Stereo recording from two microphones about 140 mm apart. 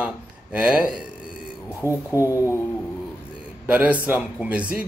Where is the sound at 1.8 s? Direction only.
20° left (ahead or behind).